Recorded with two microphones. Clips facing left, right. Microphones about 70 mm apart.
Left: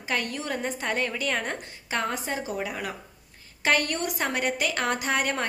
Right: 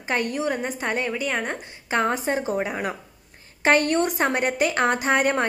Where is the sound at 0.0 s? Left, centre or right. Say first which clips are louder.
Right 5 dB; right.